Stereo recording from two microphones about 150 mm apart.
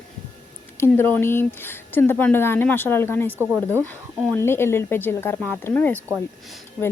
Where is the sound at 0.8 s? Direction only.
15° left (ahead or behind).